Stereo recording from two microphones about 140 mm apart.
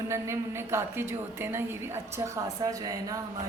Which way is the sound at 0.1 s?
20° right (ahead or behind).